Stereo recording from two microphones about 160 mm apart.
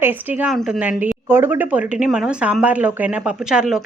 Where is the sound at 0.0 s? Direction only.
10° right (ahead or behind).